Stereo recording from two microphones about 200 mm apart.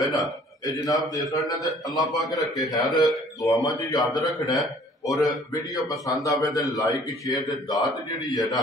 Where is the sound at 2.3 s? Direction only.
20° left (ahead or behind).